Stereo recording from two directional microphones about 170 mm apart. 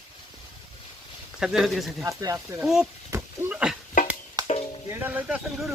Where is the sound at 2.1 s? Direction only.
20° right (ahead or behind).